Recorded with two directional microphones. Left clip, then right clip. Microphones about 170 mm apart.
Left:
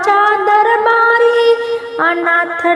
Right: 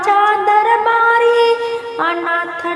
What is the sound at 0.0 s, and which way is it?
Music, 20° left (ahead or behind).